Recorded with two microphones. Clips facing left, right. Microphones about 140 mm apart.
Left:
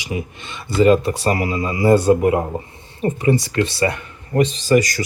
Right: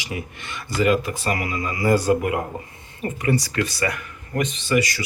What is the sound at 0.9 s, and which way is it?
Speech, 35° left (ahead or behind).